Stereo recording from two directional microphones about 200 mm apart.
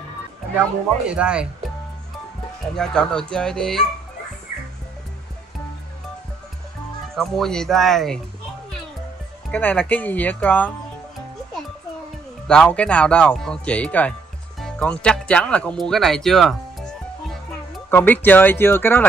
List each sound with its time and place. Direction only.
1.0 s speech: 5° right (ahead or behind)
2.7 s speech: 5° left (ahead or behind)
7.2 s speech: centre (ahead or behind)
9.5 s speech: 10° left (ahead or behind)
12.4 s speech: 5° left (ahead or behind)